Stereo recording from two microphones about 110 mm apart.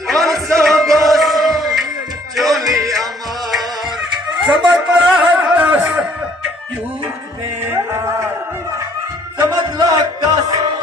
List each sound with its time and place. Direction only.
0.1 s music: centre (ahead or behind)
4.5 s music: 5° right (ahead or behind)
7.6 s music: 20° right (ahead or behind)
9.4 s music: 35° right (ahead or behind)